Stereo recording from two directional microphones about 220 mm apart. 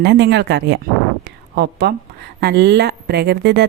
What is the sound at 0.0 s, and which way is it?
Speech, 50° right (ahead or behind).